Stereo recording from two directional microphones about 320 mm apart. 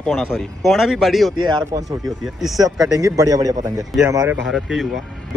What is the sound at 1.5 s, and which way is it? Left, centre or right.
Speech, centre.